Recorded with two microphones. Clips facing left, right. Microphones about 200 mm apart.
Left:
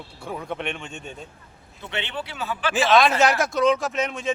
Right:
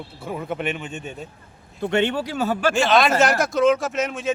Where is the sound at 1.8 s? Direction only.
45° right (ahead or behind).